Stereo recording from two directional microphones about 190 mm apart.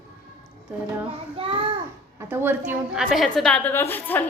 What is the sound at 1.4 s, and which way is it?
Speech, 30° right (ahead or behind).